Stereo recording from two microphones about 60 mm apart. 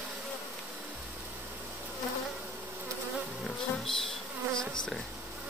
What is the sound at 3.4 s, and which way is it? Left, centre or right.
Insect, centre.